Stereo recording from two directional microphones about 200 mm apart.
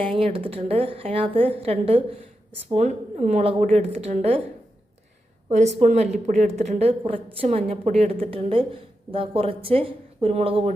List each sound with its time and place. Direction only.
0.0 s a woman's voice: 30° right (ahead or behind)
5.5 s a woman's voice: 35° right (ahead or behind)